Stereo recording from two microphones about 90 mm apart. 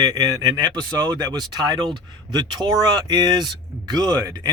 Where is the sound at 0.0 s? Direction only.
45° right (ahead or behind).